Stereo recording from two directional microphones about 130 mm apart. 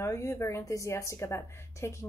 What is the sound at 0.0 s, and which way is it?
A woman's voice, 25° left (ahead or behind).